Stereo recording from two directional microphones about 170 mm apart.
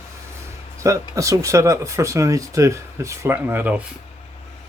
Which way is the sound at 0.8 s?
20° right (ahead or behind).